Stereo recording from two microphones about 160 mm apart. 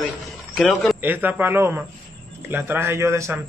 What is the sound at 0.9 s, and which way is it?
Speech, 10° right (ahead or behind).